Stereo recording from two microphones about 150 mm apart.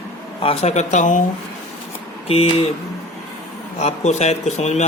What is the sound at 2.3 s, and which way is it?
Speech, 40° left (ahead or behind).